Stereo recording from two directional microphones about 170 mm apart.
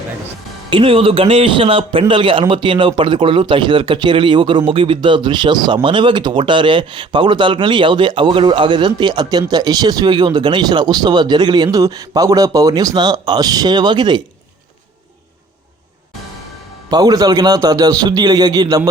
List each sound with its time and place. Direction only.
0.7 s a man's voice: 35° right (ahead or behind)
16.9 s a man's voice: 20° right (ahead or behind)